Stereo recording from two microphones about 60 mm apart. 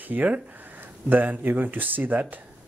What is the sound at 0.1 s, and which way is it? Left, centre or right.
Speech, right.